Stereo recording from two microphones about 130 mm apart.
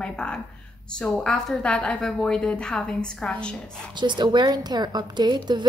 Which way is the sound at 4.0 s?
35° right (ahead or behind).